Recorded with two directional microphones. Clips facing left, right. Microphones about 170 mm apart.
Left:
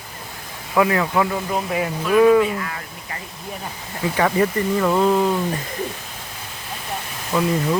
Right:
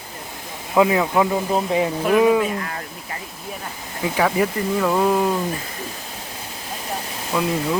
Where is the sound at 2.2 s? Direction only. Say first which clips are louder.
Left 4 dB; 15° right (ahead or behind).